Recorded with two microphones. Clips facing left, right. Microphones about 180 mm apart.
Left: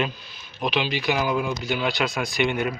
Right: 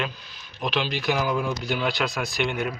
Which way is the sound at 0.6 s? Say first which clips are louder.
Left 2 dB; 5° left (ahead or behind).